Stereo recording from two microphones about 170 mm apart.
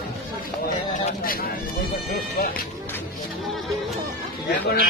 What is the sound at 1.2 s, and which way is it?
Speech, 60° left (ahead or behind).